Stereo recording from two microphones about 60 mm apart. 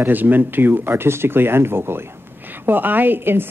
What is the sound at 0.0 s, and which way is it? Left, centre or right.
Speech, right.